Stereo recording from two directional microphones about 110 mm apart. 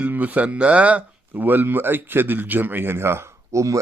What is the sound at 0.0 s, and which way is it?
Speech, 15° right (ahead or behind).